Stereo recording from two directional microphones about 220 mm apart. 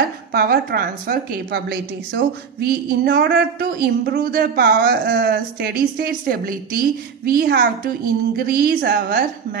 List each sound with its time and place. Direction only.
0.3 s a woman's voice: 40° right (ahead or behind)